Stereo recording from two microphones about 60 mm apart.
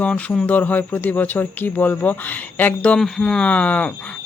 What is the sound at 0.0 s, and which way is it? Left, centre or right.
Speech, left.